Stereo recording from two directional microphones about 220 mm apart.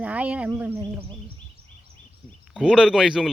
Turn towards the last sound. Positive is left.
turn(degrees=0)  # may be behind; listen again after turning